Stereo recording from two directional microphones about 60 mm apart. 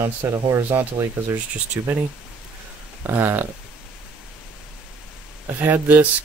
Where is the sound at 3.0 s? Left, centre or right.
Right.